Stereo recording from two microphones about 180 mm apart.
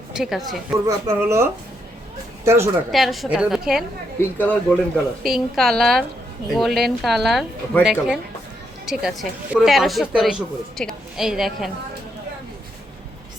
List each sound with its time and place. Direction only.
0.1 s a woman's voice: centre (ahead or behind)
0.9 s speech: 15° right (ahead or behind)
2.9 s speech: centre (ahead or behind)
4.2 s speech: 10° left (ahead or behind)
5.2 s speech: centre (ahead or behind)